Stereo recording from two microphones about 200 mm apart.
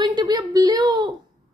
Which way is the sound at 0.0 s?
20° right (ahead or behind).